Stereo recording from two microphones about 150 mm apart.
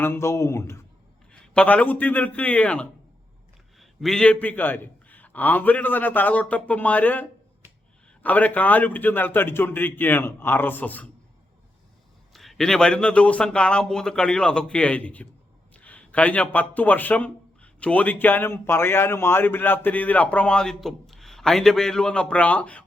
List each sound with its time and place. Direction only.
0.0 s speech: 15° left (ahead or behind)
12.3 s a man's voice: centre (ahead or behind)